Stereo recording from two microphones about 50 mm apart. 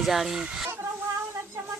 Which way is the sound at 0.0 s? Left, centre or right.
Centre.